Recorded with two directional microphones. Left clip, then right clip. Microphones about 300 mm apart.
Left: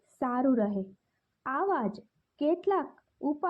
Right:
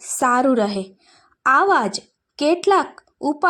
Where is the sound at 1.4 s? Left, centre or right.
Centre.